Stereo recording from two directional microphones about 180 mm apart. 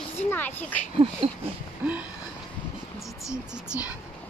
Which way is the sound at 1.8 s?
10° right (ahead or behind).